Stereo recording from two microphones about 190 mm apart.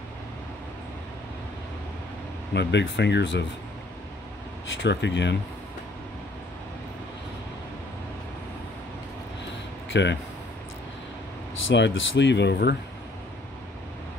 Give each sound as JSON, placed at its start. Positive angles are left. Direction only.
{"t": 2.5, "sound": "speech", "side_deg": 65}
{"t": 4.7, "sound": "speech", "side_deg": 65}
{"t": 9.8, "sound": "speech", "side_deg": 70}
{"t": 11.6, "sound": "speech", "side_deg": 80}